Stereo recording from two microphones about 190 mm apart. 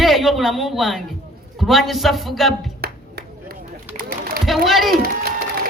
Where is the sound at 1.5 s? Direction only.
Centre (ahead or behind).